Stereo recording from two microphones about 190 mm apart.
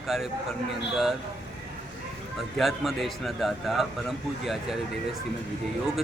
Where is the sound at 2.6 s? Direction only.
Centre (ahead or behind).